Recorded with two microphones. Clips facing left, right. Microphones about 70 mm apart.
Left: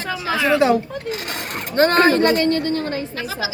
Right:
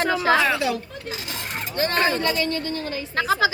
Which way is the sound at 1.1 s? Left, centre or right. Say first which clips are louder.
Left 1 dB; left.